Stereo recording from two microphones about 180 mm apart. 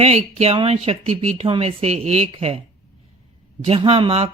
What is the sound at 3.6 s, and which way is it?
Speech, 30° right (ahead or behind).